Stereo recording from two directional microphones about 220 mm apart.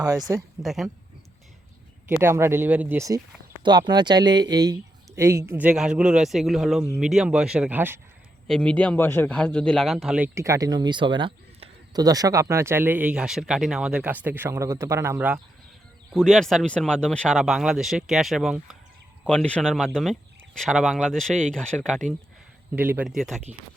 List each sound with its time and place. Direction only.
0.0 s a man's voice: 15° right (ahead or behind)
0.6 s speech: centre (ahead or behind)
2.0 s a man's voice: 10° right (ahead or behind)
8.4 s a man's voice: 5° left (ahead or behind)
16.1 s speech: centre (ahead or behind)
22.7 s speech: 5° right (ahead or behind)